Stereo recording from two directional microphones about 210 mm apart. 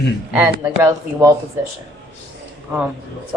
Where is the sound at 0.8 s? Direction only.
15° right (ahead or behind).